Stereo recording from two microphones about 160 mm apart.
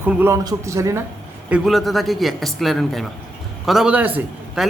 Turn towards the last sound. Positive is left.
turn(degrees=-5)  # may be behind; listen again after turning